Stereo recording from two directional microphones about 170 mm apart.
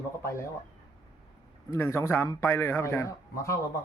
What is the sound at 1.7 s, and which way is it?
A man's voice, 15° left (ahead or behind).